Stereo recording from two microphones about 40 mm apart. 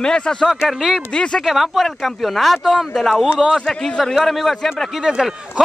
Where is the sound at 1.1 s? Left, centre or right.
Left.